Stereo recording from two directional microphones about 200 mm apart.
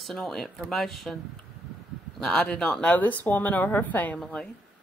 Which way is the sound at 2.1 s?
5° left (ahead or behind).